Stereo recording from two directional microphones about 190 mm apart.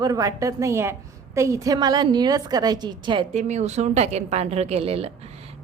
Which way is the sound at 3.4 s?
35° right (ahead or behind).